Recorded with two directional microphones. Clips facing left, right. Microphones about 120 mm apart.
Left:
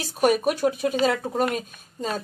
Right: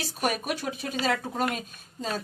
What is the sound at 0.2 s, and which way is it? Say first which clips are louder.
Speech: left 9 dB; 50° left (ahead or behind).